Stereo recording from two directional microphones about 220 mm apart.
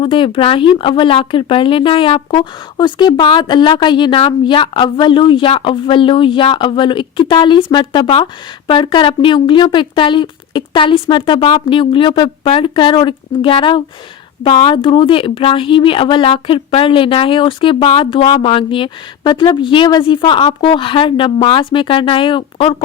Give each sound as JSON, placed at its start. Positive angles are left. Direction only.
{"t": 0.0, "sound": "speech", "side_deg": 25}